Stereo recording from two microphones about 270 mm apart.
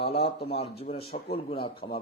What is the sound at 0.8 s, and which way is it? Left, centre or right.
Speech, left.